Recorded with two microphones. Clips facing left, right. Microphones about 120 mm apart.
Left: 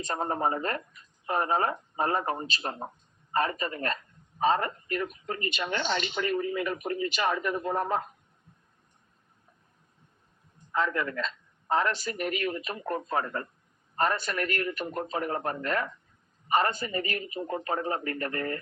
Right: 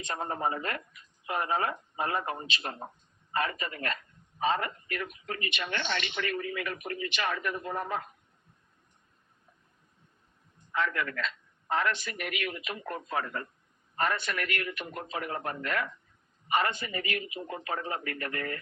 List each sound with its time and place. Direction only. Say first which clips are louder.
0.0 s a man's voice: left 3 dB; 35° left (ahead or behind)
10.8 s a man's voice: left 2 dB; 35° left (ahead or behind)